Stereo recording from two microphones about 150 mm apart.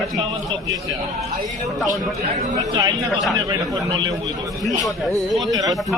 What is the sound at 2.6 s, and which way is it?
Speech, 25° right (ahead or behind).